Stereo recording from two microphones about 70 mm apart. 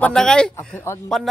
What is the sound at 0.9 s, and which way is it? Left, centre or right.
Speech, left.